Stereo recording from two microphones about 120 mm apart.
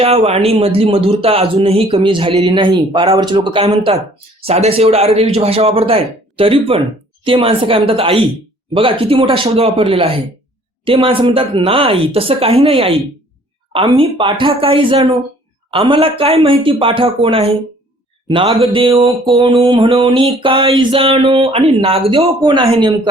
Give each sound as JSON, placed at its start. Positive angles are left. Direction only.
{"t": 0.0, "sound": "a man's voice", "side_deg": -55}
{"t": 19.3, "sound": "a sound", "side_deg": -45}
{"t": 20.1, "sound": "speech", "side_deg": -45}